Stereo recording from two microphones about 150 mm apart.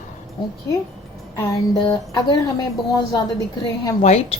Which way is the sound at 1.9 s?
25° left (ahead or behind).